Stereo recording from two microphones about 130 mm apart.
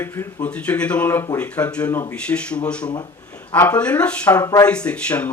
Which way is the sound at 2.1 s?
10° left (ahead or behind).